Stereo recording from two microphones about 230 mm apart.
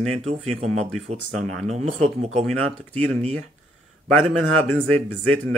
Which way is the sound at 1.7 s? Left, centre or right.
Right.